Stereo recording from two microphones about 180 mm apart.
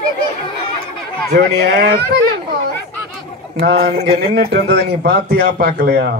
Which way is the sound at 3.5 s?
65° right (ahead or behind).